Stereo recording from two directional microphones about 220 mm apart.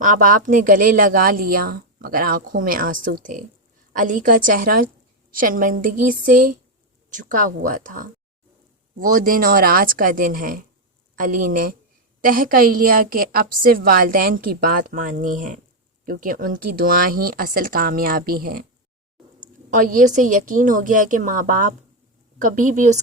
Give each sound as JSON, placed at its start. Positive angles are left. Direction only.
{"t": 0.0, "sound": "a woman's voice", "side_deg": -35}